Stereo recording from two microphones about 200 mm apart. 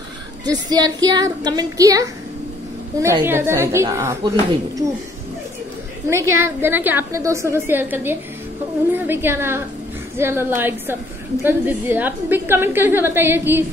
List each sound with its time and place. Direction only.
0.5 s a woman's voice: 20° right (ahead or behind)
6.0 s a woman's voice: 15° right (ahead or behind)